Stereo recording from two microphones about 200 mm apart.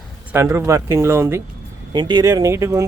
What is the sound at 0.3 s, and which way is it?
Speech, 10° right (ahead or behind).